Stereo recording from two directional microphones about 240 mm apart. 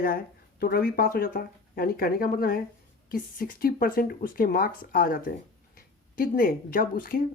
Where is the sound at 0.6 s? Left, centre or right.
Left.